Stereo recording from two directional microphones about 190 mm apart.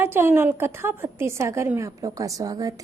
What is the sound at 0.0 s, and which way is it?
A woman's voice, 10° right (ahead or behind).